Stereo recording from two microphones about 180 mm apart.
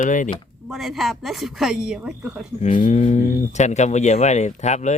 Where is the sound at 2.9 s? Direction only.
40° left (ahead or behind).